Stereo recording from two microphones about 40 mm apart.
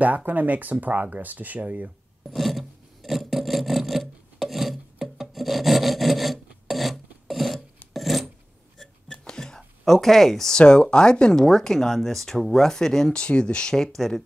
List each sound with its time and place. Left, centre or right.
0.0 s speech: right
2.3 s filing: centre
9.1 s a sound: centre
9.8 s speech: centre
10.5 s speech: left
11.3 s speech: centre
13.1 s speech: left
13.9 s speech: centre